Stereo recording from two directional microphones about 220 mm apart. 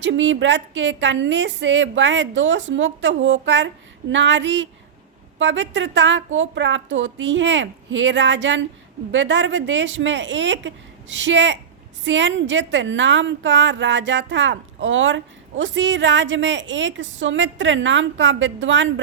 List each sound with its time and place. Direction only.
0.0 s a woman's voice: 55° right (ahead or behind)